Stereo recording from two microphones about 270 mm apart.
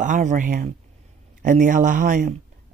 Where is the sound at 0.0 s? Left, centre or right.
Right.